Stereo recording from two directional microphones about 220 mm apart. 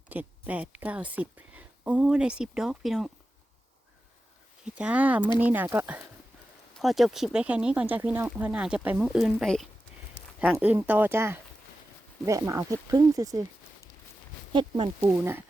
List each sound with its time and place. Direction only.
0.1 s a woman's voice: 5° right (ahead or behind)
4.6 s a woman's voice: 5° right (ahead or behind)
14.5 s speech: 20° right (ahead or behind)
15.0 s a woman's voice: 10° right (ahead or behind)